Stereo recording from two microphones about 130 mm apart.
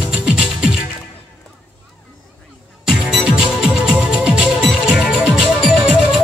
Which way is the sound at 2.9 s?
5° right (ahead or behind).